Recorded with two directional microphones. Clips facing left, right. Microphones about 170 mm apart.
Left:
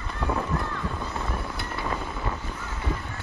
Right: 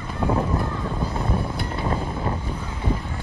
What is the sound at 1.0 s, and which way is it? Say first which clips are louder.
Vehicle: right 6 dB; 30° right (ahead or behind).